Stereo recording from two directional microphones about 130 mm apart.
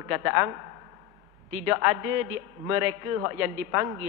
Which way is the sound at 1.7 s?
20° right (ahead or behind).